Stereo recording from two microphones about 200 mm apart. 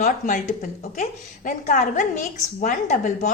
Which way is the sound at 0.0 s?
40° left (ahead or behind).